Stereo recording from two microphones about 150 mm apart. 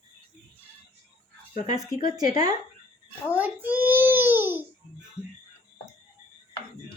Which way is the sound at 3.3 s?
10° right (ahead or behind).